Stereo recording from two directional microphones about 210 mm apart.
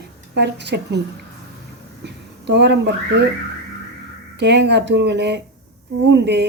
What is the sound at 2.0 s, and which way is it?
Speech, 55° right (ahead or behind).